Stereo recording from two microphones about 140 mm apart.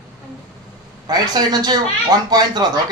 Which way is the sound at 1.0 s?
30° right (ahead or behind).